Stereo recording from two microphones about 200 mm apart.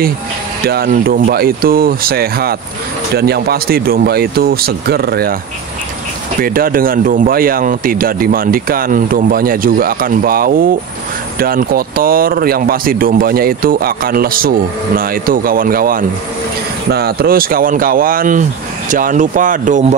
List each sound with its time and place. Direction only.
0.7 s speech: 50° right (ahead or behind)
6.4 s speech: 45° right (ahead or behind)